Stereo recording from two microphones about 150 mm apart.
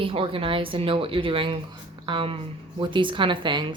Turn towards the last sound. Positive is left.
turn(degrees=-30)  # may be behind; listen again after turning